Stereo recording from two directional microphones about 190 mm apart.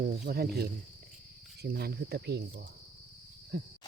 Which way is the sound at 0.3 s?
55° right (ahead or behind).